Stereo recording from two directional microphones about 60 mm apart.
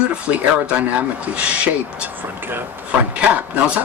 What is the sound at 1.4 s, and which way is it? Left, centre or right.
Speech, right.